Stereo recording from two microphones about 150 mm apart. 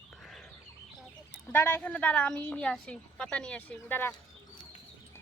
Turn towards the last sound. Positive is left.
turn(degrees=10)  # may be behind; listen again after turning